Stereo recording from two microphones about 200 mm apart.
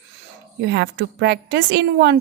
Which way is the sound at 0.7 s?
55° right (ahead or behind).